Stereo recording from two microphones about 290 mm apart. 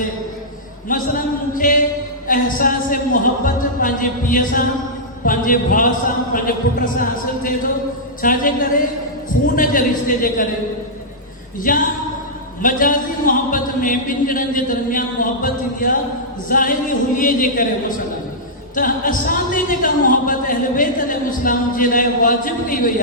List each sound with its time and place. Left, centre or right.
0.9 s a sound: left
2.2 s a man's voice: left
10.1 s a man's voice: left
11.6 s a man's voice: left